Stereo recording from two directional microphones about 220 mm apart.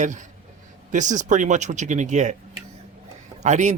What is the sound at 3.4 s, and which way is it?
Speech, 30° right (ahead or behind).